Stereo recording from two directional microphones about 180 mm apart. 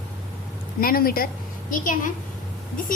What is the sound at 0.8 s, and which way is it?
A woman's voice, 55° left (ahead or behind).